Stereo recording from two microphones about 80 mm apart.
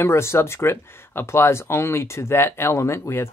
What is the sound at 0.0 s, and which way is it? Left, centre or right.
Speech, left.